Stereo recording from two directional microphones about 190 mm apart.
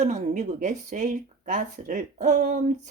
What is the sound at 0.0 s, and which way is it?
Speech, 40° right (ahead or behind).